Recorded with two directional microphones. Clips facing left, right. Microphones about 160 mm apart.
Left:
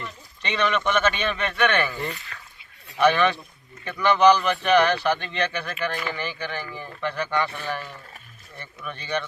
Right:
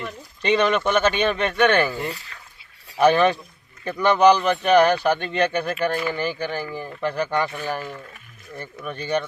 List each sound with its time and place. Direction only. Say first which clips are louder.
0.4 s speech: right 5 dB; 35° right (ahead or behind)
4.4 s speech: right 3 dB; 25° right (ahead or behind)
4.6 s speech: right 4 dB; 40° right (ahead or behind)